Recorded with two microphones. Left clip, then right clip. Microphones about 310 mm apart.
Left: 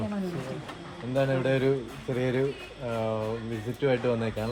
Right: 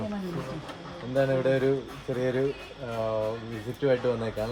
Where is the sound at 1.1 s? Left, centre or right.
Left.